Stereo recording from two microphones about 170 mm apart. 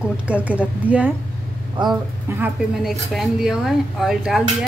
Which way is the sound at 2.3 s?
10° right (ahead or behind).